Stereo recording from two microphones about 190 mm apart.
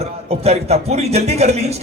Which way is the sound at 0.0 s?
35° right (ahead or behind).